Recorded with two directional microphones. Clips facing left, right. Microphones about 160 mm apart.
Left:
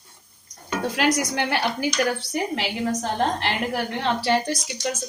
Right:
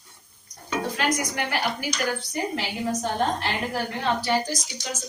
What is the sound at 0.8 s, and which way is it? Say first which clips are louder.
A woman's voice: left 5 dB; 75° left (ahead or behind).